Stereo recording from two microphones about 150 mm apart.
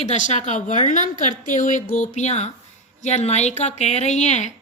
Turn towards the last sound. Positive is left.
turn(degrees=50)  # may be behind; listen again after turning